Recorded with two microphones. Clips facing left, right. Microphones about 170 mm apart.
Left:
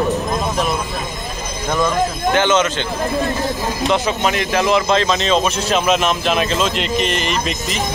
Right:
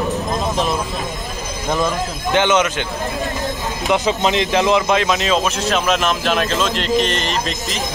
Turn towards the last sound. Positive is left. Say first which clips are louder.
# left 1 dB
turn(degrees=0)  # may be behind; listen again after turning